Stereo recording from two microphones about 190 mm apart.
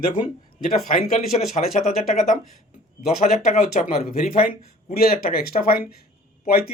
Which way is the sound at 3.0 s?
40° left (ahead or behind).